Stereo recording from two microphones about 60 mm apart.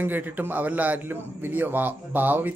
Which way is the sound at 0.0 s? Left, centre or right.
Right.